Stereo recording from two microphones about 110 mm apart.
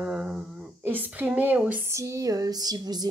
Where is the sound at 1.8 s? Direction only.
25° right (ahead or behind).